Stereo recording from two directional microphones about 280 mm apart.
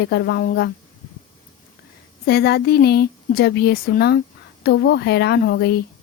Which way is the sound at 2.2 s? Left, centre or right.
Left.